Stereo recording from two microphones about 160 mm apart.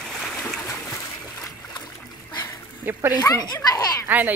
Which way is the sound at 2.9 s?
10° right (ahead or behind).